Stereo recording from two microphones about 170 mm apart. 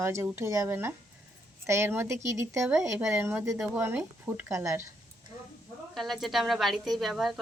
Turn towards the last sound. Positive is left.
turn(degrees=0)  # may be behind; listen again after turning